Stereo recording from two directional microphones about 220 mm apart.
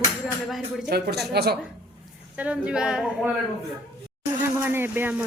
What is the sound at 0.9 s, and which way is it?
Speech, 50° right (ahead or behind).